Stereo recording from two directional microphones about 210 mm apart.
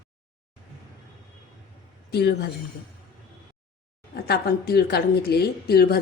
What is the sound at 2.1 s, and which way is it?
Speech, 50° left (ahead or behind).